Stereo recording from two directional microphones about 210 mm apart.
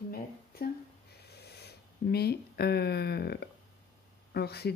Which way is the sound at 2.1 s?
50° left (ahead or behind).